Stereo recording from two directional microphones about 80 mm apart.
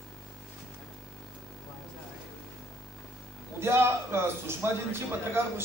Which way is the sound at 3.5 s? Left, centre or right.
Right.